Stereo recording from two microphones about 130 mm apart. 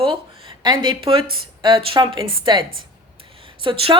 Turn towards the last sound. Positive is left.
turn(degrees=-40)  # may be behind; listen again after turning